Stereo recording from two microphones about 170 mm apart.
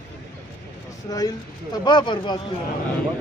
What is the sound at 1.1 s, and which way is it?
Speech, 20° left (ahead or behind).